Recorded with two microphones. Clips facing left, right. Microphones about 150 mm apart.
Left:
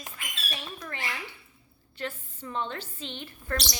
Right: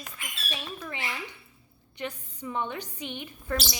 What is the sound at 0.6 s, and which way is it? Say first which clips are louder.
A woman's voice: right 2 dB; 15° right (ahead or behind).